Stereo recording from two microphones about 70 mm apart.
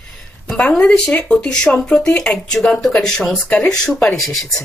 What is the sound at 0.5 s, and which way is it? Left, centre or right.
Speech, centre.